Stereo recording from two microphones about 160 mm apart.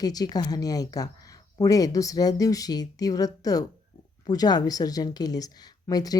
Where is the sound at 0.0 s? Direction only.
25° left (ahead or behind).